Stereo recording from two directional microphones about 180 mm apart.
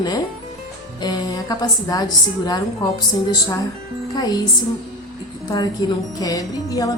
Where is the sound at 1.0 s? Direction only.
20° left (ahead or behind).